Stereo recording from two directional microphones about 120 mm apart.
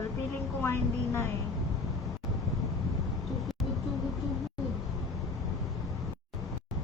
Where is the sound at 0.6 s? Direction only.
20° left (ahead or behind).